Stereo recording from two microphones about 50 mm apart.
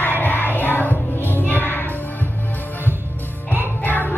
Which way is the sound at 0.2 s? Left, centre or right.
Left.